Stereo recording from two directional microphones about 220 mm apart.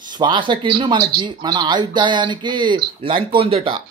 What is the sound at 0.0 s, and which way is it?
Speech, 20° right (ahead or behind).